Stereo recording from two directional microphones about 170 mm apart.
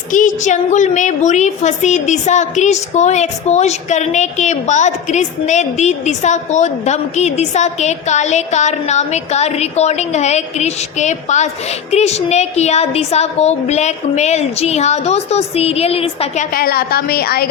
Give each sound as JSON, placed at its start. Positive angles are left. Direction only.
{"t": 0.1, "sound": "a woman's voice", "side_deg": 50}